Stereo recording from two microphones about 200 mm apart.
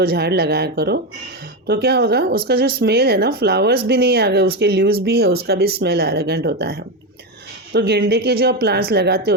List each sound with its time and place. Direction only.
0.0 s speech: 50° right (ahead or behind)